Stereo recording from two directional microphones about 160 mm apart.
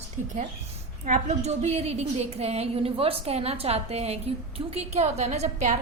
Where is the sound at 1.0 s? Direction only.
45° right (ahead or behind).